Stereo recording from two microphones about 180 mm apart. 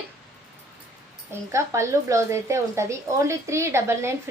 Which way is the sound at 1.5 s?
15° right (ahead or behind).